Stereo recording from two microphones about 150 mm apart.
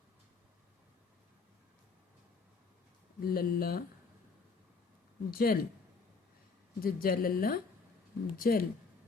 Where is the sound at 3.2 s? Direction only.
75° left (ahead or behind).